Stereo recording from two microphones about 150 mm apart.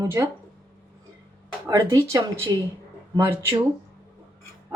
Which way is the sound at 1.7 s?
25° right (ahead or behind).